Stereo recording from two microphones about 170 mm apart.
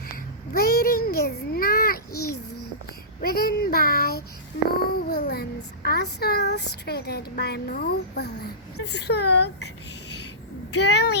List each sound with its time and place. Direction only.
0.5 s a sound: 60° left (ahead or behind)
3.2 s child singing: 60° left (ahead or behind)
4.9 s a child's voice: 60° left (ahead or behind)
8.8 s speech: 80° left
10.7 s a child's voice: 80° left